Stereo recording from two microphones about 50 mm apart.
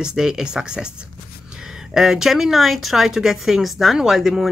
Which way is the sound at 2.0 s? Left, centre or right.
Centre.